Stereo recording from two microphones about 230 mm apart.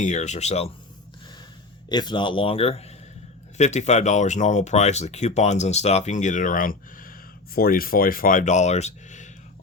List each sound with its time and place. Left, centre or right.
0.0 s speech: left
1.9 s speech: centre